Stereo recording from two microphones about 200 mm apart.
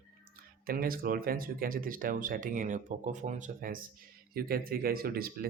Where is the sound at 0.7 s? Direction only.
45° right (ahead or behind).